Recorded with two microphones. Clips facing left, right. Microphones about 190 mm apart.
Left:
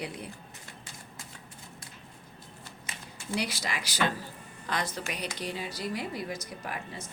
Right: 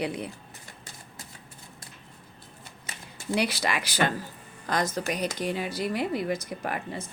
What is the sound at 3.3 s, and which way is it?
Speech, 65° right (ahead or behind).